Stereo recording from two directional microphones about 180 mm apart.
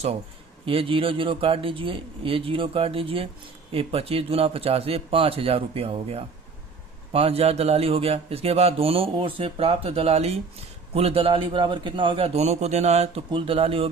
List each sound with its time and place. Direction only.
0.6 s speech: 30° right (ahead or behind)